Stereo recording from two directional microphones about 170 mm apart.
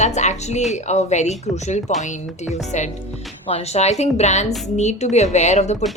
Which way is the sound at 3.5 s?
40° left (ahead or behind).